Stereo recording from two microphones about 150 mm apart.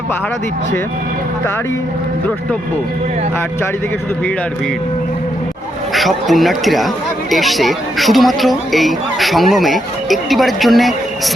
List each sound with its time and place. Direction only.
5.9 s speech: centre (ahead or behind)